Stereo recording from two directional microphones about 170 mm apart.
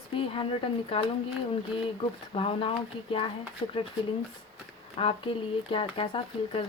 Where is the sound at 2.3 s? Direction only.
35° left (ahead or behind).